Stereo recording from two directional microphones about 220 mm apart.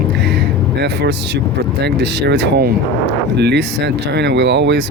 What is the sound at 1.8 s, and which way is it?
Speech, 50° right (ahead or behind).